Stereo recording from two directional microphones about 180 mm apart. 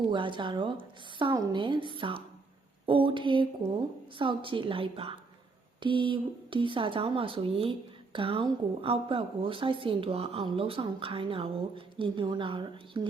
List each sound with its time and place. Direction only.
0.1 s a woman's voice: 25° right (ahead or behind)